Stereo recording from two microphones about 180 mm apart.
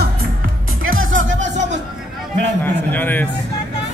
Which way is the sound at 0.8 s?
90° right.